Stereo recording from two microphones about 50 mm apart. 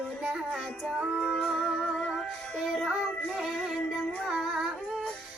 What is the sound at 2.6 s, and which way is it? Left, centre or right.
Music, centre.